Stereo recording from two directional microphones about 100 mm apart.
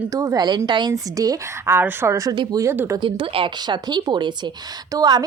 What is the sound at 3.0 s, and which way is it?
Speech, 60° right (ahead or behind).